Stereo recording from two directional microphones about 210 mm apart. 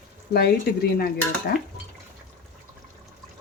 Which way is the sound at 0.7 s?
50° left (ahead or behind).